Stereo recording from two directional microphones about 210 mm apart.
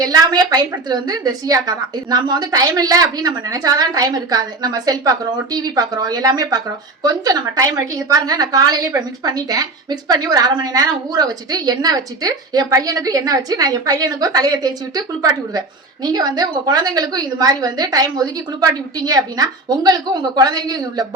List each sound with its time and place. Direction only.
0.0 s a woman's voice: 20° right (ahead or behind)